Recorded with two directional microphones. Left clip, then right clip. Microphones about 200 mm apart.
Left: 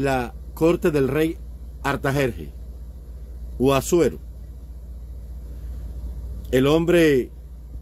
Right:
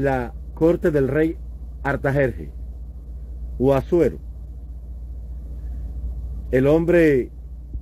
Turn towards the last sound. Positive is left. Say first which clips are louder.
# right 1 dB
turn(degrees=20)  # may be behind; listen again after turning